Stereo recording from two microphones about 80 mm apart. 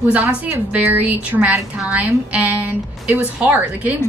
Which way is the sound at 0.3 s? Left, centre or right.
Centre.